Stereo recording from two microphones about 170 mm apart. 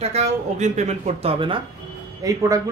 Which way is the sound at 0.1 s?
40° right (ahead or behind).